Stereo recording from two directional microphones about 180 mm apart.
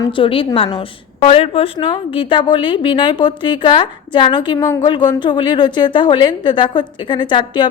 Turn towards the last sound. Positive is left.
turn(degrees=25)  # may be behind; listen again after turning